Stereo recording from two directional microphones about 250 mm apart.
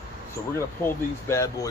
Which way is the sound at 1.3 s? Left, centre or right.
Centre.